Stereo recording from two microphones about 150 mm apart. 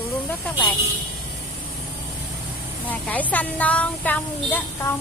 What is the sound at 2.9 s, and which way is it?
Speech, 10° left (ahead or behind).